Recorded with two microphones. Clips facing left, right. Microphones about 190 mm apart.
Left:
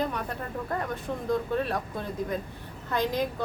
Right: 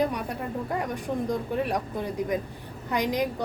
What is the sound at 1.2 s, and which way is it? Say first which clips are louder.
A woman's voice: left 2 dB; 15° right (ahead or behind).